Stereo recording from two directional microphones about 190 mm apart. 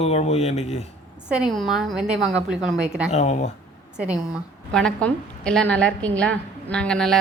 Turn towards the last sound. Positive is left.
turn(degrees=5)  # may be behind; listen again after turning